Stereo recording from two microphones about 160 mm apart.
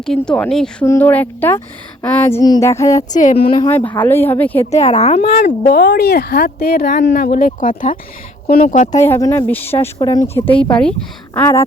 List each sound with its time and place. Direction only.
0.0 s a woman's voice: 5° left (ahead or behind)
2.4 s a sound: 20° left (ahead or behind)
3.1 s speech: 50° left (ahead or behind)
3.4 s a woman's voice: 30° left (ahead or behind)
3.7 s a woman's voice: 10° left (ahead or behind)
4.8 s speech: 45° left (ahead or behind)
5.2 s speech: 65° left (ahead or behind)
7.1 s speech: 60° left (ahead or behind)
9.0 s a woman's voice: 20° left (ahead or behind)
10.0 s a sound: 25° left (ahead or behind)
10.3 s a woman's voice: 10° left (ahead or behind)